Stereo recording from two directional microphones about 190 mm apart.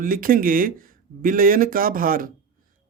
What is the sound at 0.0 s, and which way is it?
A man's voice, 45° right (ahead or behind).